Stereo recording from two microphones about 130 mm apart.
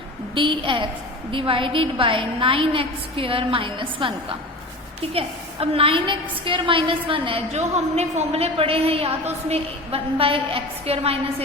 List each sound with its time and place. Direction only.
0.3 s a woman's voice: 40° right (ahead or behind)
5.1 s a woman's voice: 45° right (ahead or behind)
7.5 s a woman's voice: 60° right (ahead or behind)